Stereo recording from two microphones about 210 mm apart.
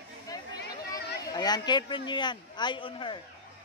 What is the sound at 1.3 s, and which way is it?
Speech, 20° left (ahead or behind).